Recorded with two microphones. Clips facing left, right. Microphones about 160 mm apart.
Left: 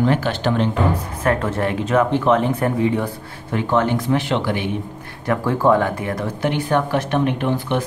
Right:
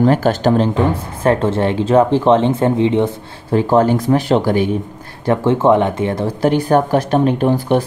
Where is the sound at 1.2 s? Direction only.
25° right (ahead or behind).